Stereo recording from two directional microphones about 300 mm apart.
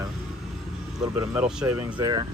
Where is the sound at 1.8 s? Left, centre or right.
Centre.